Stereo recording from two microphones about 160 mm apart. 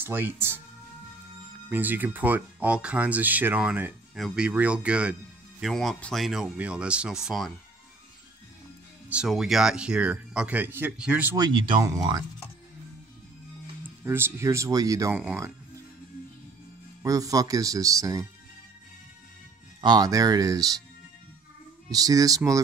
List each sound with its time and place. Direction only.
0.0 s speech: 10° right (ahead or behind)
1.7 s speech: 10° right (ahead or behind)
9.1 s speech: 5° right (ahead or behind)
11.3 s speech: 25° right (ahead or behind)
13.8 s speech: 15° right (ahead or behind)
17.0 s speech: 20° right (ahead or behind)
19.8 s speech: 25° right (ahead or behind)
21.9 s speech: 20° right (ahead or behind)